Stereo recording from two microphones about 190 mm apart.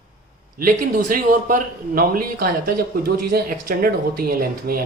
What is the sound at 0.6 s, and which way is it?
Speech, 45° right (ahead or behind).